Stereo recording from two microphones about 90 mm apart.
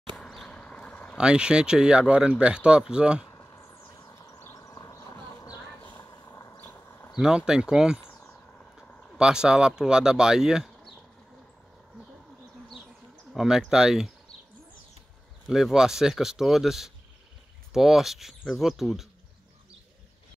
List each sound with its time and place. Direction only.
0.1 s a sound: centre (ahead or behind); by 1.1 s 15° left (ahead or behind)
1.1 s speech: 10° right (ahead or behind)
3.3 s a sound: 35° left (ahead or behind)
4.1 s vehicle: 30° left (ahead or behind)
6.0 s a sound: 45° left (ahead or behind)
6.5 s horse: 20° left (ahead or behind)
7.2 s speech: 10° right (ahead or behind)
9.2 s speech: 10° right (ahead or behind)
13.3 s speech: centre (ahead or behind)
15.4 s speech: 5° right (ahead or behind)